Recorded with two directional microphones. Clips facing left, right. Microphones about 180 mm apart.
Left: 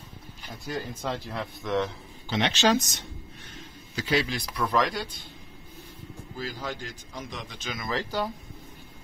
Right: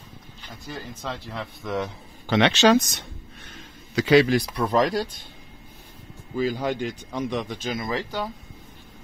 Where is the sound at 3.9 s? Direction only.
70° right (ahead or behind).